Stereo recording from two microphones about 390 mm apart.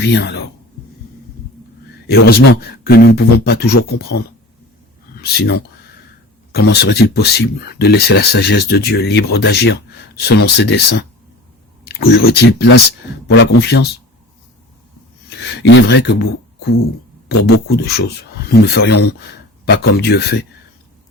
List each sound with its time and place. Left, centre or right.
0.0 s speech: left
2.0 s speech: left
5.1 s speech: left
15.3 s speech: left
17.2 s speech: left